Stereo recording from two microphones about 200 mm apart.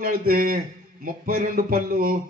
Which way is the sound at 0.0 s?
45° right (ahead or behind).